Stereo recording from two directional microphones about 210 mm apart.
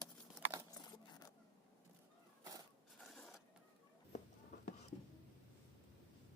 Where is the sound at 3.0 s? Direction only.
Centre (ahead or behind).